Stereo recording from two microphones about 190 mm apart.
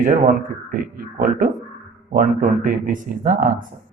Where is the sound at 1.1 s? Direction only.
50° right (ahead or behind).